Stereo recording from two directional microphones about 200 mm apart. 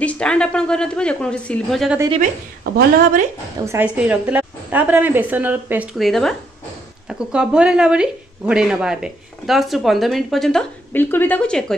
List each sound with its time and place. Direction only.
0.0 s a woman's voice: 5° left (ahead or behind)
2.6 s a woman's voice: 45° right (ahead or behind)
3.6 s a woman's voice: 10° right (ahead or behind); by 11.6 s 5° left (ahead or behind)